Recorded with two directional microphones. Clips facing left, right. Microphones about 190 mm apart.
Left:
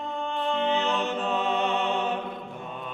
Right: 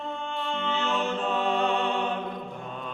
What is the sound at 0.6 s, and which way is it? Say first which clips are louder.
Music: even; 20° left (ahead or behind).